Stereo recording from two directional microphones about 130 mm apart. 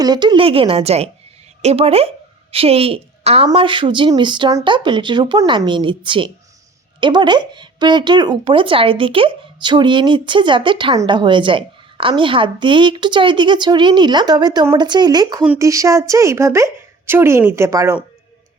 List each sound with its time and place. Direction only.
0.0 s speech: 35° right (ahead or behind)
0.4 s a woman's voice: 45° right (ahead or behind); by 17.9 s 20° right (ahead or behind)